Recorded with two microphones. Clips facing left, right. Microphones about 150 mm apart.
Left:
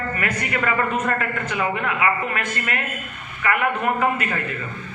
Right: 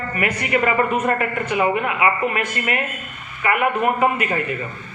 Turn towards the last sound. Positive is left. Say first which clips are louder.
# right 3 dB
turn(degrees=-15)  # may be behind; listen again after turning